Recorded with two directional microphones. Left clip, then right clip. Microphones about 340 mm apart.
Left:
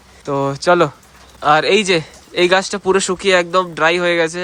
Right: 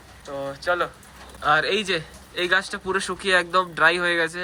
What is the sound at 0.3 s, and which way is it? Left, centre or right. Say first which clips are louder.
Speech: left 12 dB; left.